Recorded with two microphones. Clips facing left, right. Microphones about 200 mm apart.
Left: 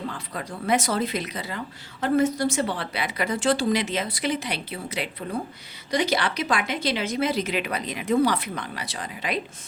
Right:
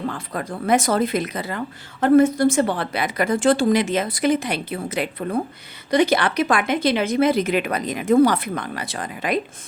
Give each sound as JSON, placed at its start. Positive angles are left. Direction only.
{"t": 0.3, "sound": "a woman's voice", "side_deg": -50}